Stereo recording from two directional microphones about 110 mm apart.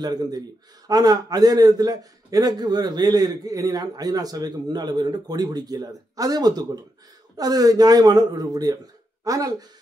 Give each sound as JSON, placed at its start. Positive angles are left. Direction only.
{"t": 0.0, "sound": "a man's voice", "side_deg": -35}